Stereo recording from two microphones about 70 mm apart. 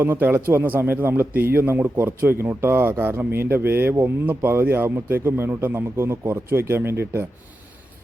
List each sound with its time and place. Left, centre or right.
0.0 s a man's voice: right